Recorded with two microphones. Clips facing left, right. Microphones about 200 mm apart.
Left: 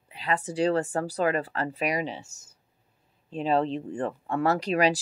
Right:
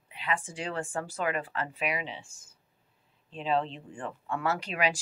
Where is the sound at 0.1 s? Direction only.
40° left (ahead or behind).